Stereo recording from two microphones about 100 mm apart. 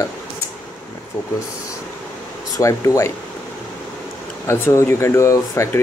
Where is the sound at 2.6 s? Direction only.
30° left (ahead or behind).